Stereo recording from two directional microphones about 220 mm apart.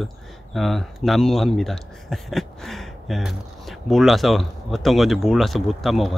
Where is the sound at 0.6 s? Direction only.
Centre (ahead or behind).